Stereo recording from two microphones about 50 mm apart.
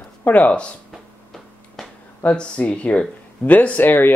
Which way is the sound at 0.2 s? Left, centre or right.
Left.